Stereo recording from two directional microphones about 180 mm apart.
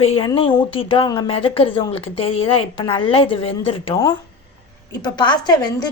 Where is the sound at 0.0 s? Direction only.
30° left (ahead or behind).